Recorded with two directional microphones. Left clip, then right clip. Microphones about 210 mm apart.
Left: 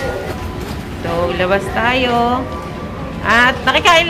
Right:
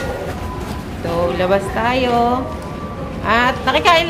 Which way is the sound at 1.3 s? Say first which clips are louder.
Left 1 dB; 5° right (ahead or behind).